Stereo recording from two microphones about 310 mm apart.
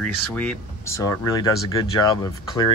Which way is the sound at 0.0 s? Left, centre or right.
Centre.